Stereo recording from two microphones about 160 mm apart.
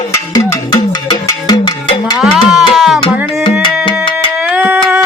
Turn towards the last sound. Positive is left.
turn(degrees=-10)  # may be behind; listen again after turning